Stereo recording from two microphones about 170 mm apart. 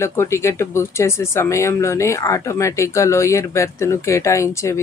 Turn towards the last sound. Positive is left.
turn(degrees=15)  # may be behind; listen again after turning